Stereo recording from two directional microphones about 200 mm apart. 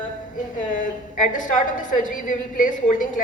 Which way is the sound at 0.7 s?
40° left (ahead or behind).